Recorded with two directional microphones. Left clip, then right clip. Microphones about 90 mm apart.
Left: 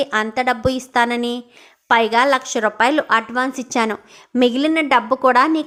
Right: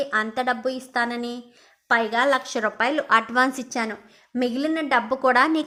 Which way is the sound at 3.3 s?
5° left (ahead or behind).